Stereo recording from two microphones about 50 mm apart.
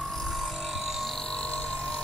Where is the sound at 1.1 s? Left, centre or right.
Centre.